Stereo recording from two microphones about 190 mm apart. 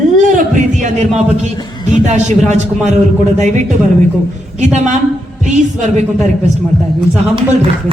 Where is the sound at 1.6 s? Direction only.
25° left (ahead or behind).